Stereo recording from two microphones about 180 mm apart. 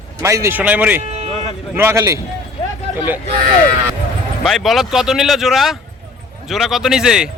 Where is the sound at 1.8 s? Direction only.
15° right (ahead or behind).